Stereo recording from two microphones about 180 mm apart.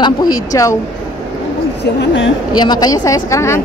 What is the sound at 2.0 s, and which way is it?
Speech, 90° left.